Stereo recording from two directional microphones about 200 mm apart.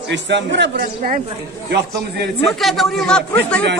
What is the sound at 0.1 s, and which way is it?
Speech, 60° right (ahead or behind).